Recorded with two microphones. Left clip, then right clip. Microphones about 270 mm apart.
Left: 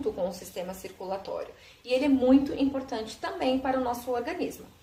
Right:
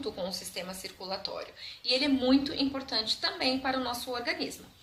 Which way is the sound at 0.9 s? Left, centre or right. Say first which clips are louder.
Left 3 dB; right.